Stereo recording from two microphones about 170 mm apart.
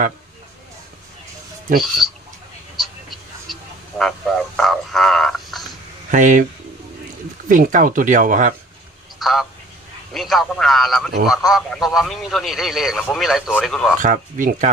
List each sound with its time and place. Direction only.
2.7 s a sound: centre (ahead or behind)
6.1 s speech: 50° right (ahead or behind)
7.4 s speech: 50° right (ahead or behind)
9.1 s telephone: centre (ahead or behind)
10.1 s a man's voice: centre (ahead or behind)
14.0 s speech: 50° right (ahead or behind)